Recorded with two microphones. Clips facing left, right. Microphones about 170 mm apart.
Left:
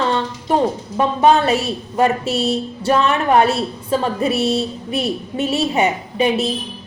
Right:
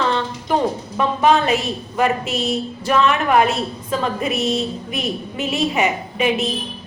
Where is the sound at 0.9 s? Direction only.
35° left (ahead or behind).